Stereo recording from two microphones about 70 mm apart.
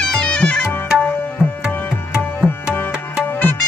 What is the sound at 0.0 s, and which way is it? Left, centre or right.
Music, centre.